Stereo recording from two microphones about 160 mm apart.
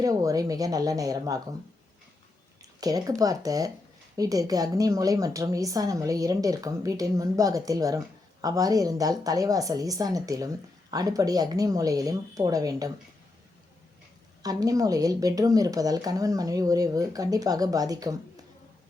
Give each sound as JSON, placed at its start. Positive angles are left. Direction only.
{"t": 0.0, "sound": "a woman's voice", "side_deg": -20}
{"t": 2.6, "sound": "a sound", "side_deg": -25}
{"t": 3.2, "sound": "a woman's voice", "side_deg": -20}
{"t": 14.4, "sound": "a woman's voice", "side_deg": -20}